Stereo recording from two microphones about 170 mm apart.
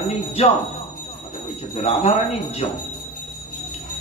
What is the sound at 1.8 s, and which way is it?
Speech, 35° left (ahead or behind).